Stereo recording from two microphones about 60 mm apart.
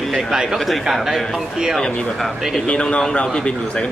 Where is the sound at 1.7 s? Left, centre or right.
Centre.